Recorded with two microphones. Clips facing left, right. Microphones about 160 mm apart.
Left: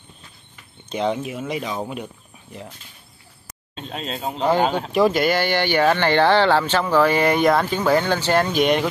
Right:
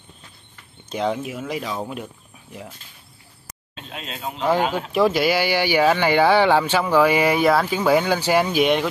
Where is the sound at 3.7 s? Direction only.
35° left (ahead or behind).